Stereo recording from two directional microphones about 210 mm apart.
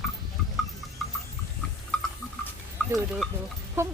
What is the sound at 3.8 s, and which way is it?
Speech, 10° right (ahead or behind).